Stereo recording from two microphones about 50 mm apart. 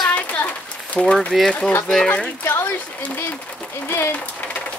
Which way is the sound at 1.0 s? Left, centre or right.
Left.